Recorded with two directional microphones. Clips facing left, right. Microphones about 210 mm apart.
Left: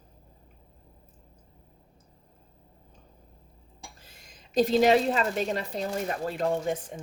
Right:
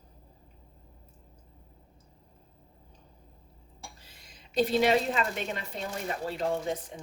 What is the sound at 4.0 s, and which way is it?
A woman's voice, 45° left (ahead or behind).